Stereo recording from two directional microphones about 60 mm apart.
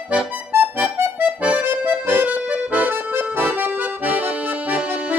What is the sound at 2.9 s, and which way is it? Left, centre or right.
Accordion, right.